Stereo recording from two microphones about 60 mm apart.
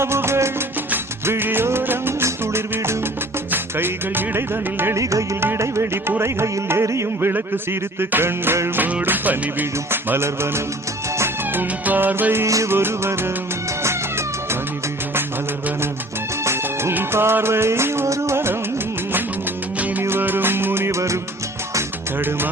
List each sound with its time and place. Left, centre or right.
0.0 s music: right
4.9 s music: right
5.4 s music: right
7.2 s music: right
8.8 s music: right
11.5 s music: right
13.8 s cat: right
16.4 s music: right
20.1 s music: right